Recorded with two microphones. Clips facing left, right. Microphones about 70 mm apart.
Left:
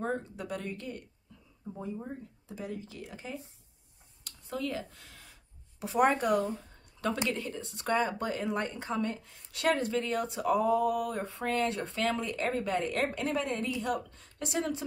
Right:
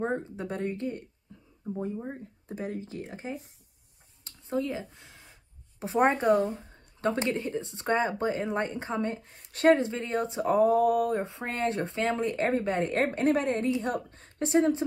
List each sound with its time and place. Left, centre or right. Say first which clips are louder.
0.0 s a woman's voice: right 3 dB; right
1.3 s a sound: right 4 dB; right
2.0 s speech: right 4 dB; right
4.2 s a sound: right 5 dB; right
5.8 s a woman's voice: right 2 dB; right
11.1 s speech: right 3 dB; right